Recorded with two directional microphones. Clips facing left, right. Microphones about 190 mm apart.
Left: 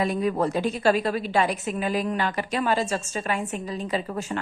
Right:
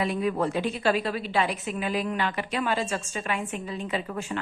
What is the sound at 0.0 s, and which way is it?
Speech, 40° left (ahead or behind).